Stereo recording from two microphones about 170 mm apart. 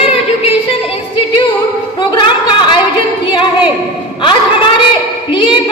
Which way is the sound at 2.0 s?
25° left (ahead or behind).